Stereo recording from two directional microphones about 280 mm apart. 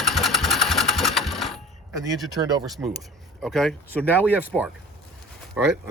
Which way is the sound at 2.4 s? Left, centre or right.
Centre.